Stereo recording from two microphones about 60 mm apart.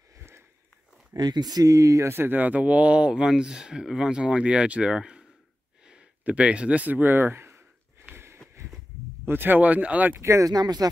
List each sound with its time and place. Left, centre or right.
1.1 s speech: right
2.0 s speech: right
8.1 s sniff: right
9.2 s speech: right
10.2 s speech: right